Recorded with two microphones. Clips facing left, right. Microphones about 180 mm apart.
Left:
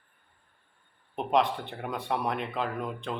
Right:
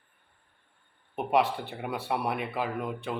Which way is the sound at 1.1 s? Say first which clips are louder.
Even; 10° right (ahead or behind).